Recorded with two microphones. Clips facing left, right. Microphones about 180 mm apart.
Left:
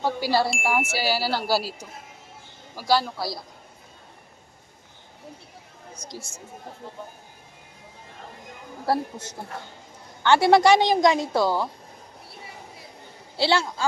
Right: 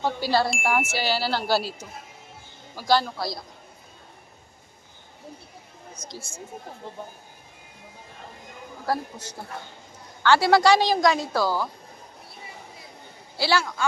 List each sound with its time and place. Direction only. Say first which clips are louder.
0.0 s speech: even; 10° left (ahead or behind)
0.5 s speech: even; centre (ahead or behind)
5.9 s speech: left 1 dB; 10° left (ahead or behind)
8.9 s a woman's voice: left 3 dB; 25° left (ahead or behind)
13.3 s a woman's voice: left 1 dB; 25° left (ahead or behind)